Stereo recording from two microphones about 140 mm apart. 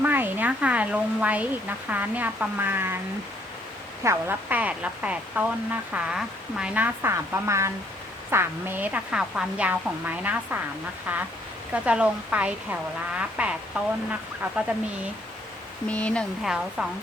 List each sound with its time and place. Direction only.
0.0 s a woman's voice: 15° right (ahead or behind)
4.0 s a woman's voice: 20° right (ahead or behind)
15.9 s speech: 10° left (ahead or behind)
16.4 s a woman's voice: 5° right (ahead or behind)